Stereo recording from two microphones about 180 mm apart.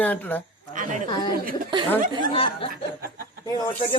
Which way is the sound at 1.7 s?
25° right (ahead or behind).